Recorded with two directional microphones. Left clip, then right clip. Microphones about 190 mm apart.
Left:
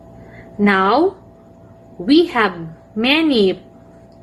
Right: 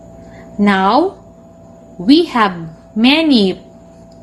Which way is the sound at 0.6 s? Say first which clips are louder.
Right 2 dB; 35° right (ahead or behind).